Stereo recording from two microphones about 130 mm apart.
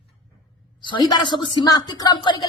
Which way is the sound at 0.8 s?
35° left (ahead or behind).